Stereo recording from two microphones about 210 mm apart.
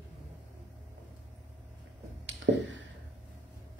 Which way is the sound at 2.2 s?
65° right (ahead or behind).